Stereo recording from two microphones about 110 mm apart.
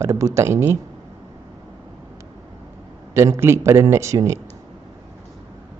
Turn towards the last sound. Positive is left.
turn(degrees=-25)  # may be behind; listen again after turning